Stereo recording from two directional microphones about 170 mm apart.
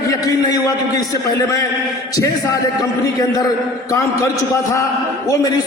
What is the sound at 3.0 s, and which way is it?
A man's voice, 20° left (ahead or behind).